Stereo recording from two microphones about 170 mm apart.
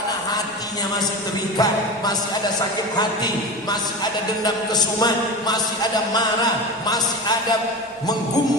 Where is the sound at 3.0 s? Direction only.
25° left (ahead or behind).